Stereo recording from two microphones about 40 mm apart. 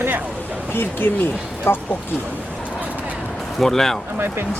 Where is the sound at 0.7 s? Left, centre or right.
Left.